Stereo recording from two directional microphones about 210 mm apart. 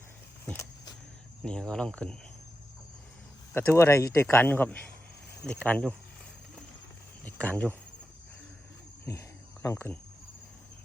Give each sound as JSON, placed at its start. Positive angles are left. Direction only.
{"t": 0.4, "sound": "vehicle", "side_deg": 10}
{"t": 1.5, "sound": "speech", "side_deg": 5}
{"t": 3.5, "sound": "speech", "side_deg": 10}
{"t": 7.3, "sound": "speech", "side_deg": 5}
{"t": 9.6, "sound": "speech", "side_deg": 10}